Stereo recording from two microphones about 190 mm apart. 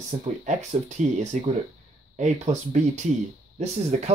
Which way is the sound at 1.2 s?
35° right (ahead or behind).